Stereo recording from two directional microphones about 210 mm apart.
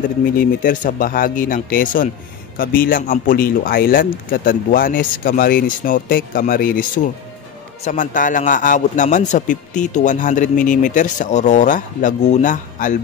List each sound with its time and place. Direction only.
0.4 s a man's voice: 40° left (ahead or behind)
7.8 s a man's voice: 35° left (ahead or behind)